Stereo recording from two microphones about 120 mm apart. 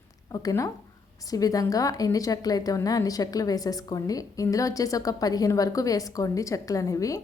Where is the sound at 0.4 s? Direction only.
25° left (ahead or behind).